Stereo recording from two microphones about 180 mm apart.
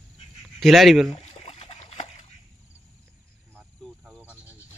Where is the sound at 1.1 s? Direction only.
35° left (ahead or behind).